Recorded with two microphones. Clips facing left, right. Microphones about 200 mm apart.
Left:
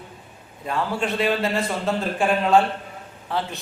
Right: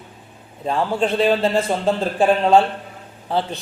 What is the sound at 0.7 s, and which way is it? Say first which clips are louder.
Speech: right 5 dB; 30° right (ahead or behind).